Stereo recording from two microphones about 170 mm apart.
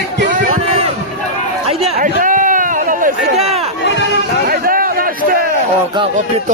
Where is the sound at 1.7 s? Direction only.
35° right (ahead or behind).